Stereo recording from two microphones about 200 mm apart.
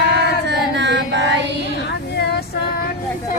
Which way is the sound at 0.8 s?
60° right (ahead or behind).